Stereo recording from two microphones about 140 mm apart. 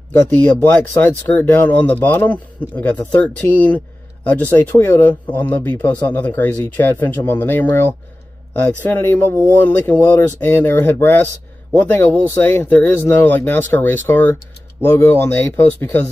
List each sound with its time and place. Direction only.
0.1 s speech: 15° left (ahead or behind)